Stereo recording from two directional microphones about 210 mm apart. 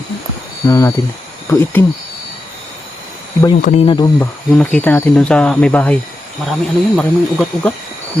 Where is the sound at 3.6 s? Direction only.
30° left (ahead or behind).